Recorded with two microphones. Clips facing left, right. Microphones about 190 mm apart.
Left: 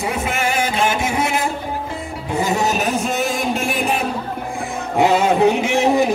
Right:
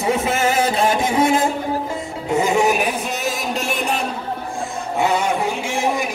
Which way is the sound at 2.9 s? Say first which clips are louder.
Left 4 dB; 50° left (ahead or behind).